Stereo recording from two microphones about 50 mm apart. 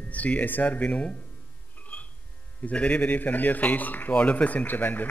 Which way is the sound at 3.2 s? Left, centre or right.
Left.